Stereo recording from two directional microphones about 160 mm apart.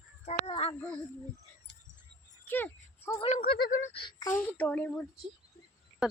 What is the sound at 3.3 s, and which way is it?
Speech, 70° left (ahead or behind).